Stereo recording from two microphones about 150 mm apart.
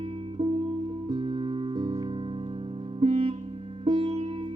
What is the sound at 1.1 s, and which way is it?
Music, 35° right (ahead or behind).